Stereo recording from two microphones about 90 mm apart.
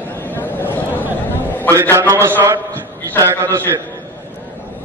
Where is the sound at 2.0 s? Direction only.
30° right (ahead or behind).